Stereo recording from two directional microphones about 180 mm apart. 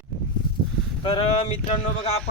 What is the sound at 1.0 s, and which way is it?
Speech, 30° left (ahead or behind).